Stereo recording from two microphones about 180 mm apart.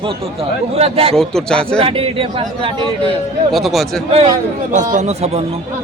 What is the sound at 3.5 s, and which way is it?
Speech, centre (ahead or behind).